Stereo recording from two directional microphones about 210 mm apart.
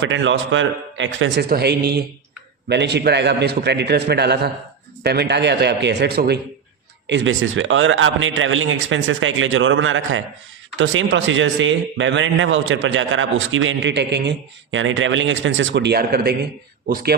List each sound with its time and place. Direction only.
0.0 s a man's voice: 60° right (ahead or behind)
7.1 s a man's voice: 65° right (ahead or behind); by 17.2 s 45° right (ahead or behind)